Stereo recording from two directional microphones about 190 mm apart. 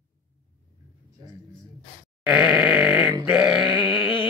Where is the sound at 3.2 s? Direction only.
5° right (ahead or behind).